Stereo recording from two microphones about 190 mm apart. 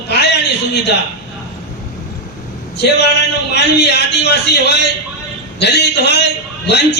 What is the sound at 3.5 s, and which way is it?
A man's voice, 60° left (ahead or behind).